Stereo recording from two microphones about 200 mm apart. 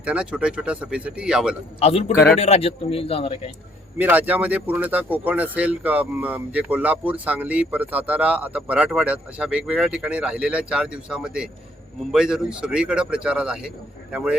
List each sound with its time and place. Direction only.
0.0 s speech: 5° right (ahead or behind)
1.8 s a man's voice: 30° left (ahead or behind)
3.9 s speech: 10° right (ahead or behind)